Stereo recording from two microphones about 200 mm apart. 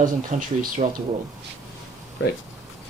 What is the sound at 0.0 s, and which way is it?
Speech, 40° right (ahead or behind).